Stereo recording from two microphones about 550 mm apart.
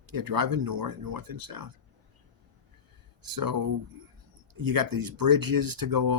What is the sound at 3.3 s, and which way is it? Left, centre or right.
Speech, right.